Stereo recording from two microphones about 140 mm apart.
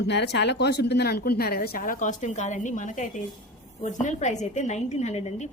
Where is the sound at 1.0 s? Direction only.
90° left.